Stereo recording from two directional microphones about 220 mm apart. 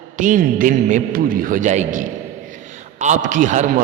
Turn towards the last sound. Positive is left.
turn(degrees=-35)  # may be behind; listen again after turning